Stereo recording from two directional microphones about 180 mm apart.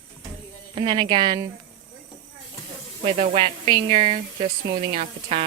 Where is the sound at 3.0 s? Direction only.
35° right (ahead or behind).